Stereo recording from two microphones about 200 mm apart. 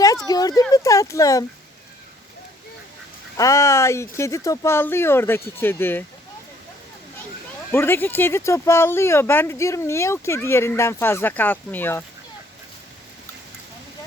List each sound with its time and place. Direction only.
0.3 s speech: 20° left (ahead or behind)
3.3 s speech: 15° left (ahead or behind)
7.7 s speech: 10° left (ahead or behind)